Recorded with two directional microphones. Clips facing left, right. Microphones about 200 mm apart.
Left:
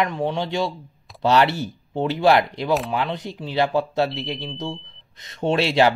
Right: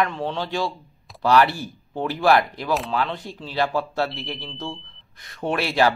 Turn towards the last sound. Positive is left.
turn(degrees=25)  # may be behind; listen again after turning